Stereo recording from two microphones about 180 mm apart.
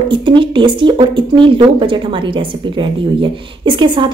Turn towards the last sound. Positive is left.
turn(degrees=-25)  # may be behind; listen again after turning